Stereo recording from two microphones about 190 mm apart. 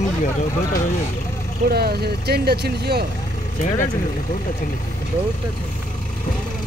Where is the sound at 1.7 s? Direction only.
55° right (ahead or behind).